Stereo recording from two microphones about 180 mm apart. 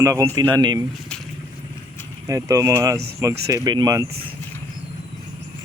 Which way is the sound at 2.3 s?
20° right (ahead or behind).